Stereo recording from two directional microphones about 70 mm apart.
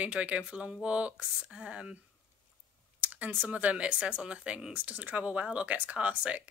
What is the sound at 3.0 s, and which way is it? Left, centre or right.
Speech, right.